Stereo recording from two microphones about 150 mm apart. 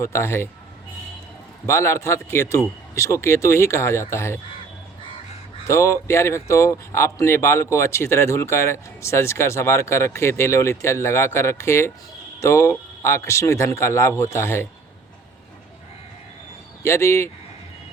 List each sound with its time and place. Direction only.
0.0 s speech: 20° left (ahead or behind)
1.6 s speech: 20° left (ahead or behind)
5.6 s speech: 20° left (ahead or behind)
16.8 s speech: 20° left (ahead or behind)